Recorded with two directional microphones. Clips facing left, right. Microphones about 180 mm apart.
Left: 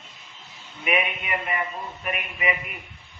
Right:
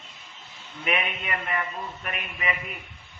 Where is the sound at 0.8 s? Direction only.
10° left (ahead or behind).